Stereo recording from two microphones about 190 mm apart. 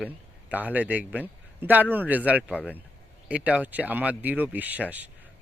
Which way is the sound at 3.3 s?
5° right (ahead or behind).